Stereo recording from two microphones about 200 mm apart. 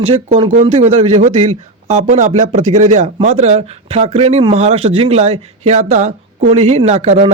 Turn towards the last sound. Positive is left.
turn(degrees=-30)  # may be behind; listen again after turning